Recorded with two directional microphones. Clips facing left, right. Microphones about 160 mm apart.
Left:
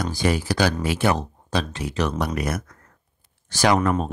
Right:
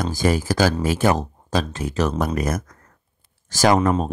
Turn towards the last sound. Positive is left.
turn(degrees=-25)  # may be behind; listen again after turning